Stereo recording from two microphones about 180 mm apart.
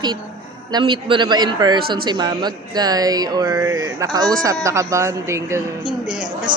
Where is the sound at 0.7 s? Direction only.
25° right (ahead or behind).